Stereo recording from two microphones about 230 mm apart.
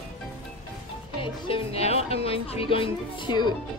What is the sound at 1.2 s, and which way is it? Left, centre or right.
Music, left.